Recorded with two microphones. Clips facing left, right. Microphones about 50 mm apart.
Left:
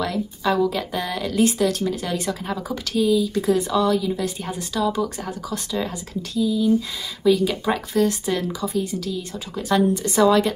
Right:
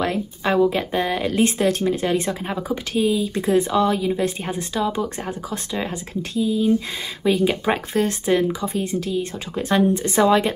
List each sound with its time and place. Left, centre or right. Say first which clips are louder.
0.0 s a woman's voice: right 1 dB; right